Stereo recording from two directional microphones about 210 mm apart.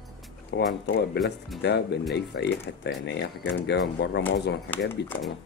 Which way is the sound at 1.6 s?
55° left (ahead or behind).